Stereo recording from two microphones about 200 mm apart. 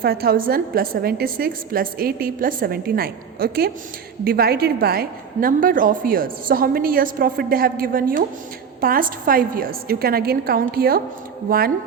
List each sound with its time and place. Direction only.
0.0 s a woman's voice: 50° right (ahead or behind)